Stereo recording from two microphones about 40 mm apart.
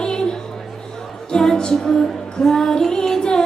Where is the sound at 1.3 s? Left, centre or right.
Centre.